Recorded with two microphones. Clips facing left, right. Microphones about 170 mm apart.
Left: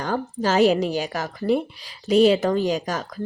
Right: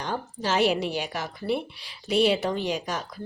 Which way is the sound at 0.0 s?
45° left (ahead or behind).